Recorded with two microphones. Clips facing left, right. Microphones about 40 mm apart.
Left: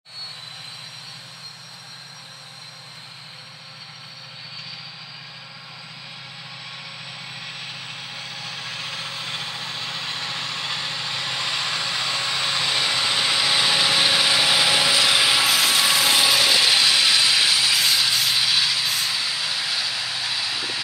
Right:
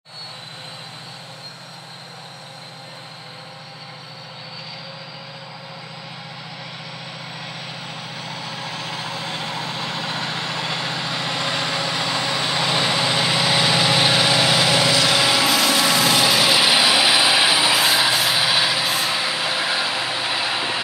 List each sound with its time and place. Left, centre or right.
9.1 s vehicle: right; by 12.4 s centre
12.4 s vehicle: right; by 14.9 s centre
14.9 s vehicle: centre
15.4 s vehicle: centre; by 20.8 s right